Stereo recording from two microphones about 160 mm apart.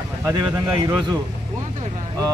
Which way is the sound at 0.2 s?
20° right (ahead or behind).